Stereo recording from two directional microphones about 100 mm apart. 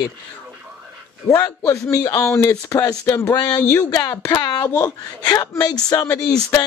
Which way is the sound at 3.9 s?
40° left (ahead or behind).